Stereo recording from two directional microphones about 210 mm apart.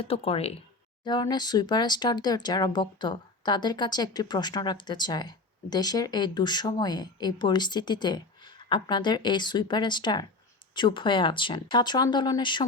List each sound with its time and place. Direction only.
0.0 s speech: 25° left (ahead or behind)